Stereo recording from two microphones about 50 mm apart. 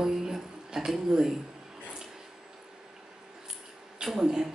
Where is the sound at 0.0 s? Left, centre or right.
Centre.